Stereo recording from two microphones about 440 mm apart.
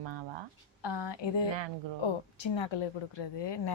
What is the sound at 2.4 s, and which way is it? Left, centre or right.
Speech, left.